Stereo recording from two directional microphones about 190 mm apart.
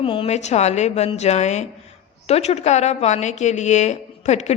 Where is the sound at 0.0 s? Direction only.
30° left (ahead or behind).